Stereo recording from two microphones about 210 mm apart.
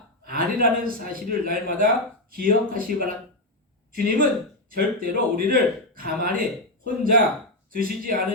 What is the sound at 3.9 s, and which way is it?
A man's voice, 45° right (ahead or behind).